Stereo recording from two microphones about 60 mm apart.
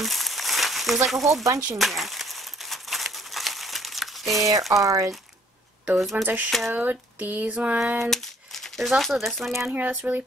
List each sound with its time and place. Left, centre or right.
0.0 s crumpling: centre
1.0 s speech: centre
1.4 s speech: right
1.8 s crumpling: centre
4.7 s speech: right
5.9 s speech: centre
6.2 s a sound: right
8.0 s speech: centre
9.8 s a sound: right